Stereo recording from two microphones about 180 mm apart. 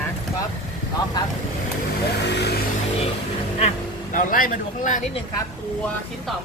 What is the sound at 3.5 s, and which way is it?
Speech, 40° left (ahead or behind).